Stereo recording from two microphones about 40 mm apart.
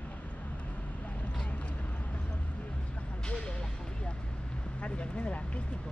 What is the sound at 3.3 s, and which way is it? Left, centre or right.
Vehicle, left.